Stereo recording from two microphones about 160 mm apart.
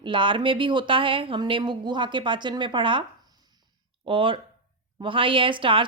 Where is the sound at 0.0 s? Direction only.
30° right (ahead or behind).